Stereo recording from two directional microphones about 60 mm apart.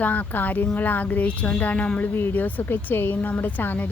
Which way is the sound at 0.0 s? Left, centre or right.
Left.